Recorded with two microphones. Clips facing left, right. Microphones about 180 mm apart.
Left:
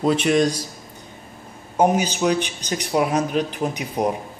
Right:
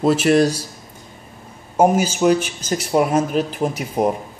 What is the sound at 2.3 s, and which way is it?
Speech, 5° right (ahead or behind).